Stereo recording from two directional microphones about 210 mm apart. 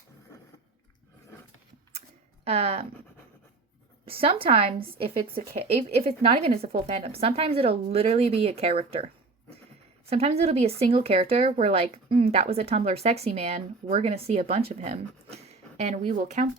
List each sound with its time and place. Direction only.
2.4 s speech: 30° right (ahead or behind)
4.0 s speech: 25° right (ahead or behind)
10.1 s speech: 30° right (ahead or behind)